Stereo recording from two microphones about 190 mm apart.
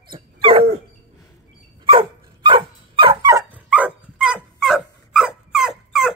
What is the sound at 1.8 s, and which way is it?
Dog, 25° right (ahead or behind).